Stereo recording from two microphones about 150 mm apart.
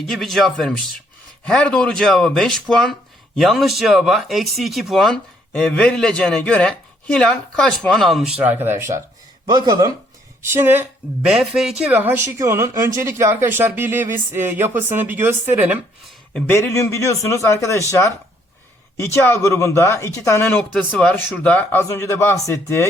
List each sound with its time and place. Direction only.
0.1 s speech: centre (ahead or behind); by 9.0 s 15° right (ahead or behind)
9.5 s speech: 30° right (ahead or behind)
10.5 s speech: 15° right (ahead or behind)
11.3 s speech: 5° right (ahead or behind)
16.5 s a man's voice: 15° left (ahead or behind)
18.9 s speech: 15° left (ahead or behind)